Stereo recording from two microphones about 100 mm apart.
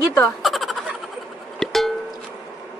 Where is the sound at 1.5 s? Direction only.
5° left (ahead or behind).